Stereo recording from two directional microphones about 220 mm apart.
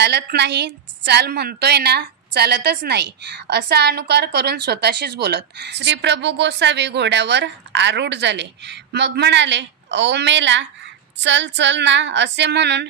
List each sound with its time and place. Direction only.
0.0 s a woman's voice: 50° right (ahead or behind)